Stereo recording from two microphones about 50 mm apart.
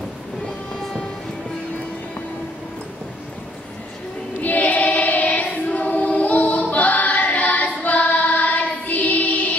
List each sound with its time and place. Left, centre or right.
4.4 s child singing: left
5.8 s choir: left